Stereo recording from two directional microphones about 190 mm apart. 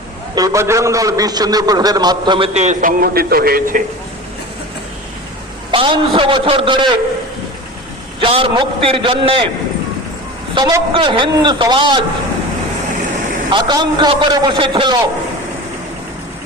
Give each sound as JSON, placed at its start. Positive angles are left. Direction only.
{"t": 0.3, "sound": "a man's voice", "side_deg": -15}
{"t": 2.6, "sound": "speech", "side_deg": -40}
{"t": 5.7, "sound": "a man's voice", "side_deg": -25}
{"t": 8.2, "sound": "a man's voice", "side_deg": -25}
{"t": 10.5, "sound": "a man's voice", "side_deg": -20}
{"t": 13.5, "sound": "a man's voice", "side_deg": -25}